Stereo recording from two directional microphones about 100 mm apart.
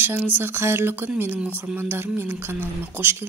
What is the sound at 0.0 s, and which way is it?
Speech, 20° right (ahead or behind).